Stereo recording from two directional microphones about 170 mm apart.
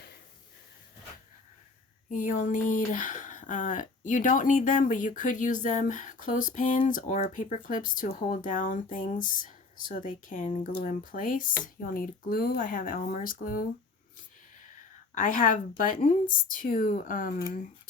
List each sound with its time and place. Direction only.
2.0 s speech: 50° left (ahead or behind)
15.1 s speech: 50° left (ahead or behind)